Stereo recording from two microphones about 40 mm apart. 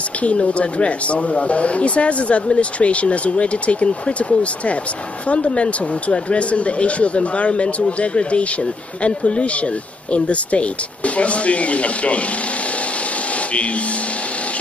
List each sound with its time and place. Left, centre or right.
0.2 s speech: left